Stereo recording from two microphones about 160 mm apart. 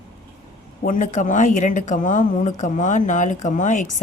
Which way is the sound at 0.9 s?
55° left (ahead or behind).